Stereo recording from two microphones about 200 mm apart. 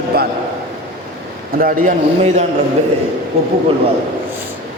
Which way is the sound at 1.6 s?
40° right (ahead or behind).